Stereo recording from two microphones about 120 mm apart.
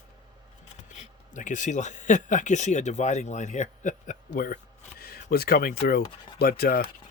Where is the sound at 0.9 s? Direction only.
90° left.